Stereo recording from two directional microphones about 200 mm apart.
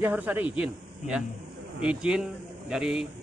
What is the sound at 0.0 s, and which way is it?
A man's voice, 10° right (ahead or behind).